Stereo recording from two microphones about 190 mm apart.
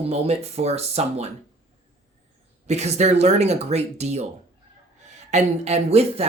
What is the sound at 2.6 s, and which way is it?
Speech, 35° right (ahead or behind).